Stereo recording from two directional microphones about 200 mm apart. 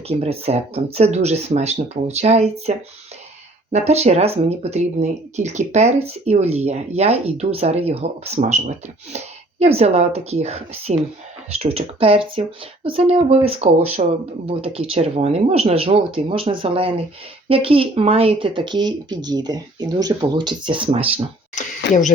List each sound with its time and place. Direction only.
0.1 s speech: 30° right (ahead or behind)